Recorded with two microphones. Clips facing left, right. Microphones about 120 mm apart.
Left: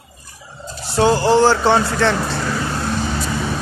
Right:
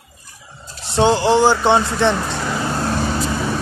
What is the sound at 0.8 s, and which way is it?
Speech, 25° right (ahead or behind).